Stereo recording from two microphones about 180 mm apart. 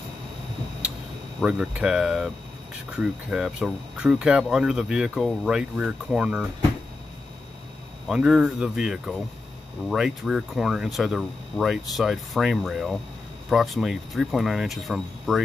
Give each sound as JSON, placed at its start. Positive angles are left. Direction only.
{"t": 1.4, "sound": "speech", "side_deg": -5}
{"t": 8.1, "sound": "speech", "side_deg": -5}